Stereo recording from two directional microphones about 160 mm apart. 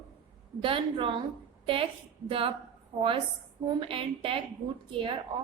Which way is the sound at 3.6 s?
35° right (ahead or behind).